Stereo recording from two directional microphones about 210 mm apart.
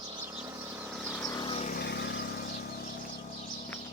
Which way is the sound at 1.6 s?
45° left (ahead or behind).